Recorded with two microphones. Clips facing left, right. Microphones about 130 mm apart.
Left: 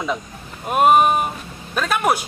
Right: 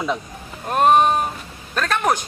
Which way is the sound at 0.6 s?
10° left (ahead or behind).